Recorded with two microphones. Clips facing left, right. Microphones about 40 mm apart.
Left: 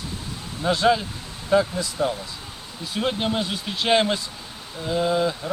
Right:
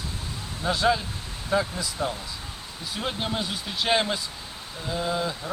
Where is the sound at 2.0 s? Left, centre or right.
Centre.